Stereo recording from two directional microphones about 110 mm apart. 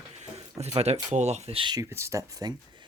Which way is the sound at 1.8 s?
25° right (ahead or behind).